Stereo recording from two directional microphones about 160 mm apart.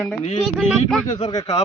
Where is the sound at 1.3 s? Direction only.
25° left (ahead or behind).